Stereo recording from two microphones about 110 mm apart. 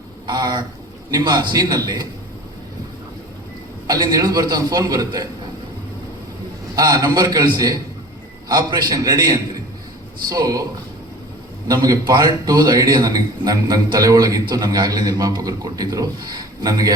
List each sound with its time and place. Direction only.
0.3 s a man's voice: 40° right (ahead or behind)
3.8 s a man's voice: 35° right (ahead or behind)
6.7 s a man's voice: 35° right (ahead or behind)
11.7 s a man's voice: 40° right (ahead or behind)